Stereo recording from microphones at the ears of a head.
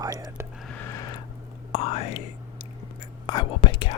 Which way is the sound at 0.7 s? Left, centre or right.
Left.